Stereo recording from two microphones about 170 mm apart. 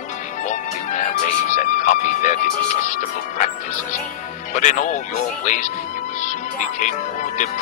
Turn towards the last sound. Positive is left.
turn(degrees=50)  # may be behind; listen again after turning